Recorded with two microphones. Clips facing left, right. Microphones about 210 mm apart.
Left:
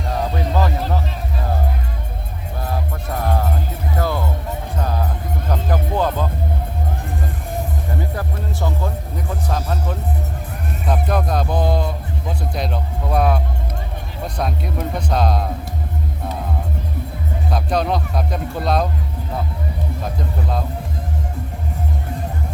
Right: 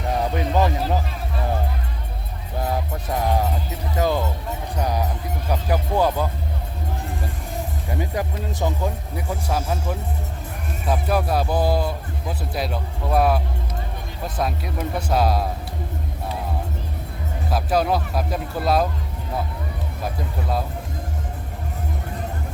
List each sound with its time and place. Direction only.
0.3 s a sound: 15° right (ahead or behind)
3.1 s music: 15° right (ahead or behind)
7.9 s music: 15° right (ahead or behind)
10.8 s speech: 5° right (ahead or behind)
17.5 s speech: 5° right (ahead or behind)